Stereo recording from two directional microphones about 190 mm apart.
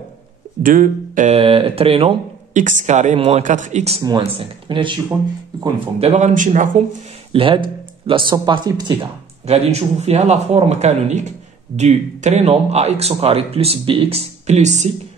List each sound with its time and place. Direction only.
0.6 s a man's voice: 45° right (ahead or behind)
7.3 s speech: 25° right (ahead or behind)
9.5 s a man's voice: 35° right (ahead or behind)